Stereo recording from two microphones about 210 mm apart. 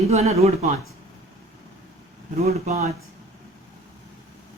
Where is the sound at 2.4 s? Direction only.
30° right (ahead or behind).